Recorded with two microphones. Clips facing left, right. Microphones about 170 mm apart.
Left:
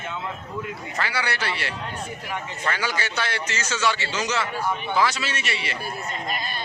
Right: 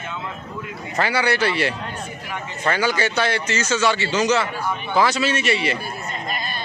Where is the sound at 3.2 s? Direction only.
20° right (ahead or behind).